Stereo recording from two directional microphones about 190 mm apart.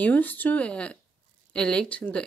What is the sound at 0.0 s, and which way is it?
Speech, 10° left (ahead or behind).